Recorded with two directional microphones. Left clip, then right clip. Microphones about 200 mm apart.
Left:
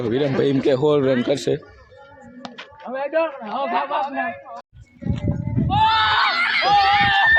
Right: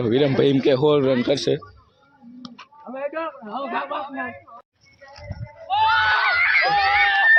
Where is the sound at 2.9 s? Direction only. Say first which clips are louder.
Left 6 dB; 35° left (ahead or behind).